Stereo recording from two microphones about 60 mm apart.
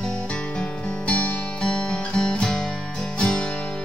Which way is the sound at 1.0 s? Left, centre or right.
Left.